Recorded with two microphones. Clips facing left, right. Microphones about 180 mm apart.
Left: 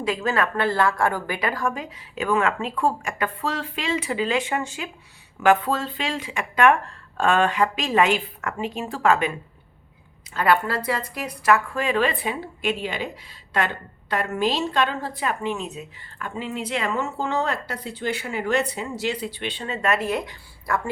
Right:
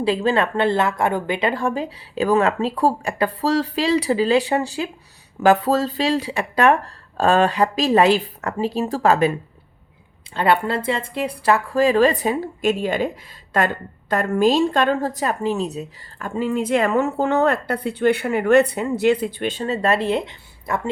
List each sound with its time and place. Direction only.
0.0 s a woman's voice: 30° right (ahead or behind)
10.3 s a woman's voice: 25° right (ahead or behind)